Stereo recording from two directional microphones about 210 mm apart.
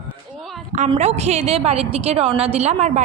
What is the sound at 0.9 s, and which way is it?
A woman's voice, 30° right (ahead or behind).